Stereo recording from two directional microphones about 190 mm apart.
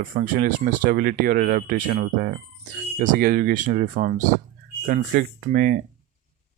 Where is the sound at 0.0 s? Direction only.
50° right (ahead or behind).